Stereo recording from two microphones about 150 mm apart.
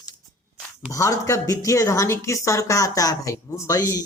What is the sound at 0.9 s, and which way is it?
A woman's voice, 20° left (ahead or behind).